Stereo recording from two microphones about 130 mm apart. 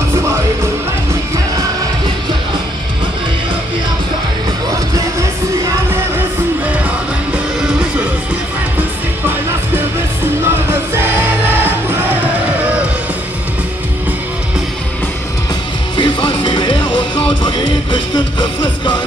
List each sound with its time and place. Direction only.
16.0 s music: 40° left (ahead or behind)